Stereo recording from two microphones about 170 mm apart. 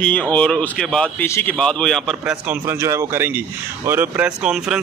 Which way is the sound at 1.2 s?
15° left (ahead or behind).